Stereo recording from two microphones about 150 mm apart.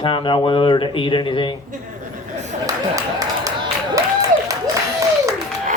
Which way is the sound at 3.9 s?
20° right (ahead or behind).